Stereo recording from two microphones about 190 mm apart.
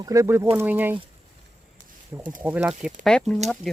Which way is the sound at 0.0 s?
15° right (ahead or behind).